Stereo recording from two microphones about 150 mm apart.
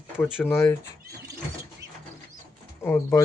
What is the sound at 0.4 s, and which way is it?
Speech, 15° left (ahead or behind).